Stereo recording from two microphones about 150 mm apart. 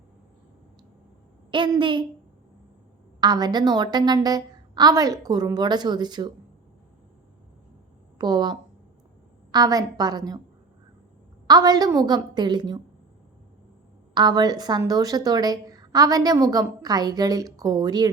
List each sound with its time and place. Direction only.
1.5 s a woman's voice: 35° right (ahead or behind)
3.2 s a woman's voice: 25° right (ahead or behind)
8.2 s a woman's voice: 30° right (ahead or behind)
11.4 s a woman's voice: 25° right (ahead or behind)
14.1 s a woman's voice: 30° right (ahead or behind)